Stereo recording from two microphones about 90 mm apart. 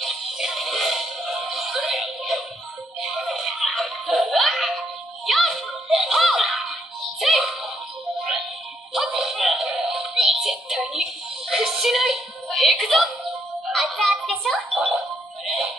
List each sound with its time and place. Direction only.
0.0 s music: 5° right (ahead or behind)
8.9 s music: 5° right (ahead or behind)